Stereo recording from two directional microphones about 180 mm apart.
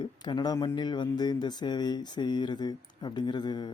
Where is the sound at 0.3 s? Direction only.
25° left (ahead or behind).